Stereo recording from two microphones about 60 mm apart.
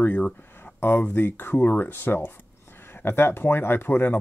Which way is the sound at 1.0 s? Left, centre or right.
Left.